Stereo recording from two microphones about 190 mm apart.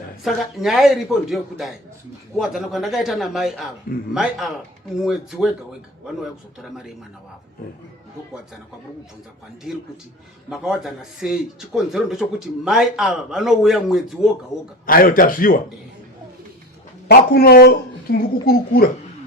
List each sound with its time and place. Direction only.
0.3 s speech: centre (ahead or behind)
6.6 s speech: centre (ahead or behind)
10.5 s speech: 5° right (ahead or behind)
14.8 s speech: 50° left (ahead or behind)
17.1 s speech: 55° left (ahead or behind)